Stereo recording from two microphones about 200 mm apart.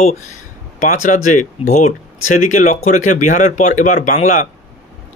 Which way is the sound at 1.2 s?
35° left (ahead or behind).